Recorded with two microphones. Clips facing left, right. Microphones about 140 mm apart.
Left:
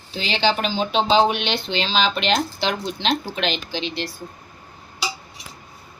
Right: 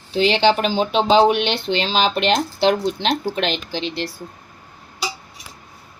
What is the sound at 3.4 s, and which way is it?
Speech, 50° right (ahead or behind).